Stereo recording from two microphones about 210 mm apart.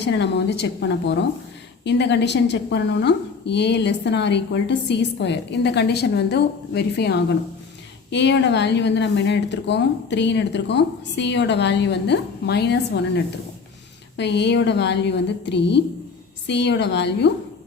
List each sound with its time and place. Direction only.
0.0 s a woman's voice: 55° left (ahead or behind)
14.2 s a woman's voice: 55° left (ahead or behind)